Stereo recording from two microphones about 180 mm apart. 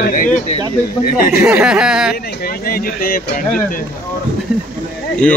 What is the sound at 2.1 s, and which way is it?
Speech, 60° left (ahead or behind).